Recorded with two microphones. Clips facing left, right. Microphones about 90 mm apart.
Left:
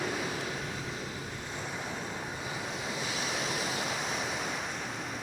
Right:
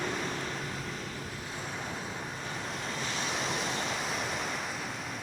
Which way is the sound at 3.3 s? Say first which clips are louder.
Right 1 dB; centre (ahead or behind).